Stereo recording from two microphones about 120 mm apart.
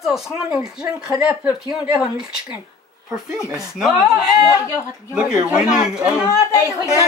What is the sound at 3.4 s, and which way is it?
Speech, 5° right (ahead or behind).